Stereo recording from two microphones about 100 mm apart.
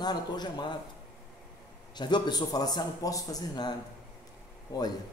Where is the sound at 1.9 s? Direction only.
45° left (ahead or behind).